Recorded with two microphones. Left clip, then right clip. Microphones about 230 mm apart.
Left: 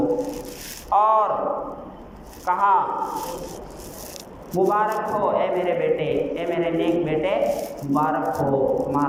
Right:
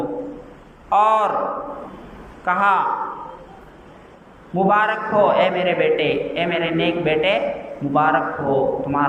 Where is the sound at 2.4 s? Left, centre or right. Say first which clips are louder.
Right 2 dB; right.